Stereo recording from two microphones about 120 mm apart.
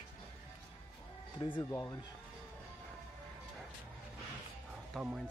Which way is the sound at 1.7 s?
20° left (ahead or behind).